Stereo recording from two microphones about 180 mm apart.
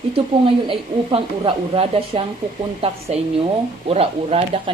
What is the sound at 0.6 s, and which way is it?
A woman's voice, 30° right (ahead or behind).